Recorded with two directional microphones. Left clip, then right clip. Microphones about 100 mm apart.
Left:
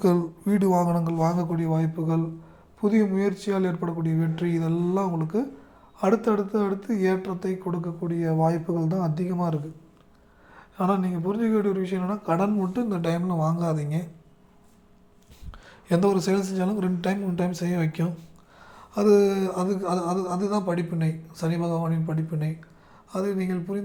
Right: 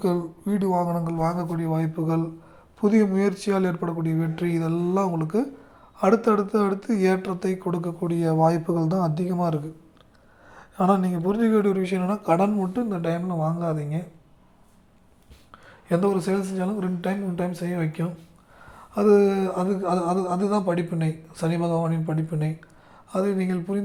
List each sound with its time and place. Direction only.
0.0 s a woman's voice: 20° left (ahead or behind)
1.5 s speech: 15° left (ahead or behind)
1.7 s speech: centre (ahead or behind)
12.5 s speech: centre (ahead or behind)
15.5 s speech: 10° left (ahead or behind)
18.6 s a sound: centre (ahead or behind); by 23.8 s 25° right (ahead or behind)